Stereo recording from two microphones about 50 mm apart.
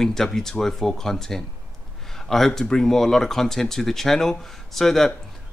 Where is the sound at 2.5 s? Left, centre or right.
Centre.